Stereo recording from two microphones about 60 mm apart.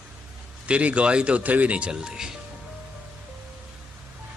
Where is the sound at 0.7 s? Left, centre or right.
Right.